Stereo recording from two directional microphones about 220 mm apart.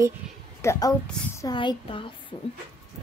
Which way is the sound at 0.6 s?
10° left (ahead or behind).